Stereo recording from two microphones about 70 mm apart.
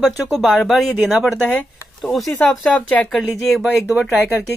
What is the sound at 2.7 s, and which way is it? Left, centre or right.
Speech, centre.